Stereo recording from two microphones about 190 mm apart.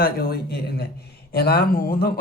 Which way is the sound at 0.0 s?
55° left (ahead or behind).